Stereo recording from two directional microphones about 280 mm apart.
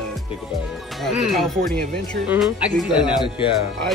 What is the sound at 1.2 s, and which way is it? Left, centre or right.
Speech, centre.